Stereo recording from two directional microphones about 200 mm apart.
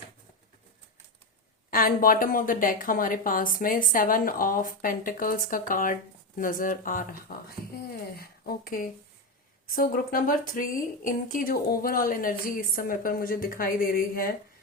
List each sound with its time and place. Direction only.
1.7 s speech: 45° left (ahead or behind)